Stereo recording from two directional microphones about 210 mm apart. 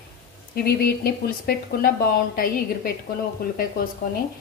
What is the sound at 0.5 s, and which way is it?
A woman's voice, 45° left (ahead or behind).